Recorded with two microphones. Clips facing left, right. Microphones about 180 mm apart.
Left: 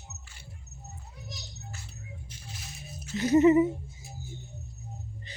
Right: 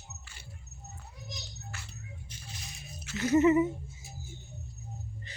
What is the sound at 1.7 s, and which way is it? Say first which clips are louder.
Music: right 1 dB; 90° right.